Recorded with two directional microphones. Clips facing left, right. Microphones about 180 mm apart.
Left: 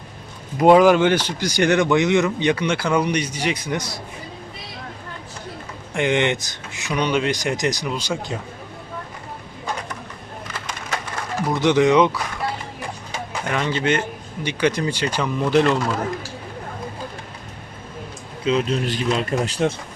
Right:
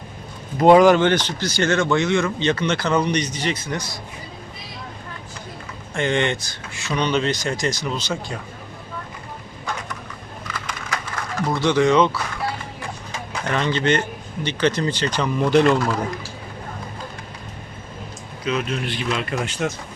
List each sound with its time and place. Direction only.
0.5 s speech: 5° left (ahead or behind)
5.9 s speech: 15° left (ahead or behind)
10.7 s a sound: 25° left (ahead or behind)
11.4 s speech: 15° left (ahead or behind)
13.5 s speech: 5° left (ahead or behind)
18.4 s a man's voice: 25° left (ahead or behind)
18.9 s speech: 40° left (ahead or behind)